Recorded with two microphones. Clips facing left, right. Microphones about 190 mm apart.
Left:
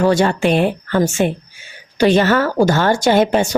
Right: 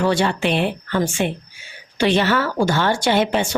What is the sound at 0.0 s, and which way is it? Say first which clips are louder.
A woman's voice: left 5 dB; 45° left (ahead or behind).